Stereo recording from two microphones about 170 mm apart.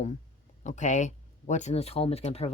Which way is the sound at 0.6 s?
45° left (ahead or behind).